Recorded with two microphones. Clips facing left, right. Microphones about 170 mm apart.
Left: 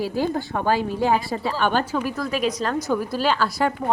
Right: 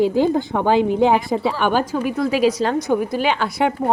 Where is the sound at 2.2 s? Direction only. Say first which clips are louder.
Right 7 dB; 30° right (ahead or behind).